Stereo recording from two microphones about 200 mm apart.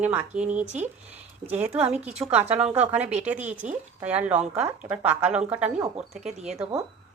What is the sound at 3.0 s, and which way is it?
Speech, 35° right (ahead or behind).